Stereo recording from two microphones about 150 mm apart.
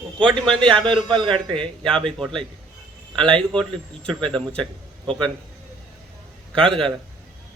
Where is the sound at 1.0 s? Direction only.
35° right (ahead or behind).